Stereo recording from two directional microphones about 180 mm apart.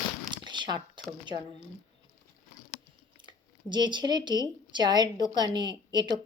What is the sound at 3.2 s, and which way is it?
A woman's voice, 25° right (ahead or behind).